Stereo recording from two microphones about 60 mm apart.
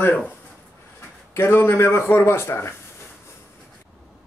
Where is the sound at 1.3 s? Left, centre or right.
Left.